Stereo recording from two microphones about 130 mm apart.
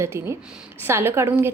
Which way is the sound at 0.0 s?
20° right (ahead or behind).